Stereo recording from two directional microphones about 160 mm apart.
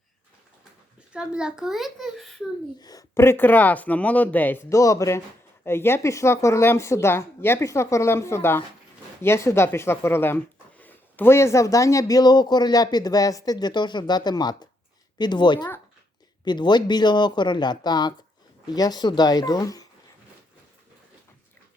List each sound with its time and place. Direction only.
1.1 s a child's voice: 5° right (ahead or behind)
2.8 s a woman's voice: 20° left (ahead or behind)